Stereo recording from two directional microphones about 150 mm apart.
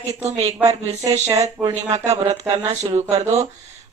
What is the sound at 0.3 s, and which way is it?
Speech, 45° right (ahead or behind).